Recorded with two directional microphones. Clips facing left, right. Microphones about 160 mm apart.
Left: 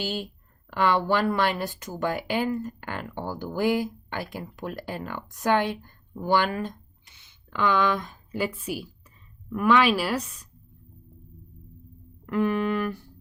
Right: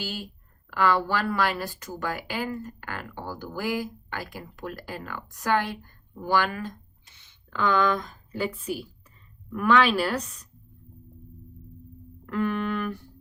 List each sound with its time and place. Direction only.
0.0 s speech: 25° left (ahead or behind)
7.5 s speech: 5° left (ahead or behind)
12.2 s speech: 10° left (ahead or behind)